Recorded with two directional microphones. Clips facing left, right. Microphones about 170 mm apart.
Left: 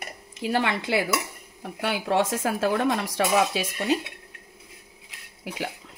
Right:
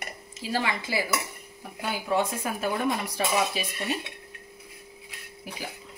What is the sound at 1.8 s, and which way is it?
Speech, 80° left.